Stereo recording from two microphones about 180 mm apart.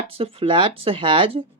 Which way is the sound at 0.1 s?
30° right (ahead or behind).